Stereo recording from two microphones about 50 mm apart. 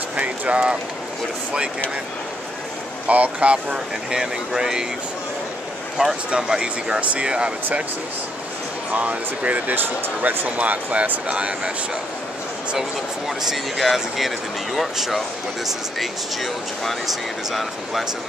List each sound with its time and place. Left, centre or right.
0.1 s speech: right
3.1 s speech: right
3.7 s speech: centre
5.9 s speech: centre
7.0 s speech: right
8.9 s speech: right
13.5 s speech: centre